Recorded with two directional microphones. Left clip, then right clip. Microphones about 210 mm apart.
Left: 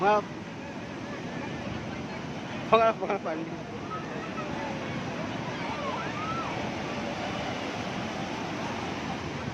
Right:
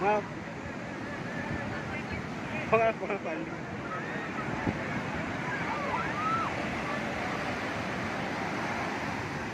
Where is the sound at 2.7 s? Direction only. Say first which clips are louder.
Left 4 dB; 15° left (ahead or behind).